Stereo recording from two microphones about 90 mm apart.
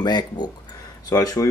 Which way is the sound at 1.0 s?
40° left (ahead or behind).